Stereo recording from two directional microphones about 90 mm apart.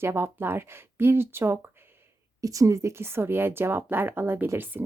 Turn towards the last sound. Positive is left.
turn(degrees=-25)  # may be behind; listen again after turning